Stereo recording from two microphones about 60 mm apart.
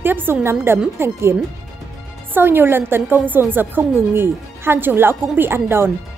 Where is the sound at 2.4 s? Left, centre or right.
Right.